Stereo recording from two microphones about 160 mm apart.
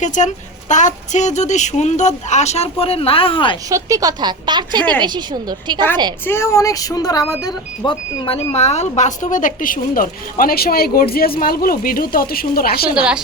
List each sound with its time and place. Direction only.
0.0 s a woman's voice: 50° left (ahead or behind); by 3.6 s 30° left (ahead or behind)
3.7 s speech: 20° right (ahead or behind)
6.2 s speech: 15° left (ahead or behind); by 12.9 s 70° left (ahead or behind)
12.9 s a woman's voice: 5° right (ahead or behind)